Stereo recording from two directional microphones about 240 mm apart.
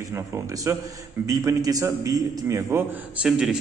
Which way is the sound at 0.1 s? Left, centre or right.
Centre.